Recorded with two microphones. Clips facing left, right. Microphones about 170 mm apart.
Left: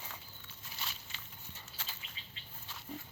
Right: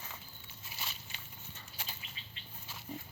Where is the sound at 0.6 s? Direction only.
5° right (ahead or behind).